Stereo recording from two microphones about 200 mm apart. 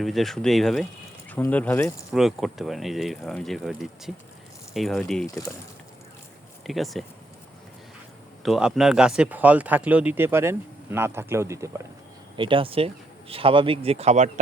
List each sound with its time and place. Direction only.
0.0 s speech: centre (ahead or behind)
6.7 s speech: centre (ahead or behind)
8.4 s speech: centre (ahead or behind)
12.4 s speech: 25° right (ahead or behind)